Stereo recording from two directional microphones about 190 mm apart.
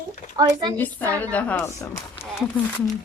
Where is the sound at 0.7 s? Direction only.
10° left (ahead or behind).